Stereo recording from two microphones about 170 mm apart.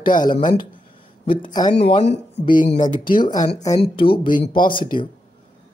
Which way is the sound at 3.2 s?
25° left (ahead or behind).